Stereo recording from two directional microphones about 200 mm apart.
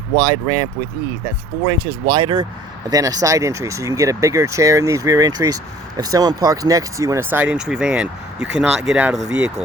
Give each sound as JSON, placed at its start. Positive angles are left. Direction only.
{"t": 0.2, "sound": "speech", "side_deg": -20}